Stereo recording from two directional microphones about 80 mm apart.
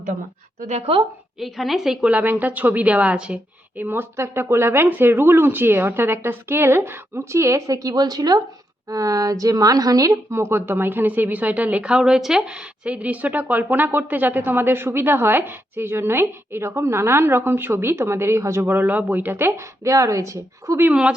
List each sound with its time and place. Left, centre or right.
1.4 s a woman's voice: centre
2.0 s a woman's voice: right
18.6 s a woman's voice: right